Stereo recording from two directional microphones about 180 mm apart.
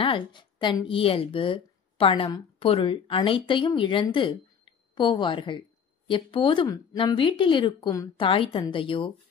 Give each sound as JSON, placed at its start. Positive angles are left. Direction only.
{"t": 0.0, "sound": "a woman's voice", "side_deg": 25}